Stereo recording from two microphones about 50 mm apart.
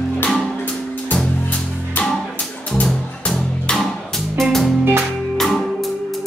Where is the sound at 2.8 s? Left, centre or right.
Centre.